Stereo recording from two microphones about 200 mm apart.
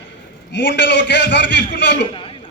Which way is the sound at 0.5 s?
60° left (ahead or behind).